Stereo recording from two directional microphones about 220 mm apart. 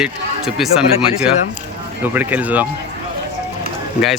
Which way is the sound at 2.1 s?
5° right (ahead or behind).